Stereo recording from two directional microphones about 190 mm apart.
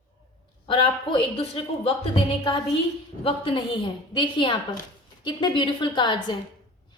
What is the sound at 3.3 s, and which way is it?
A woman's voice, 30° left (ahead or behind).